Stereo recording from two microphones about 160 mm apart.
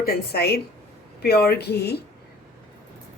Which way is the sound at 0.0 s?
85° left.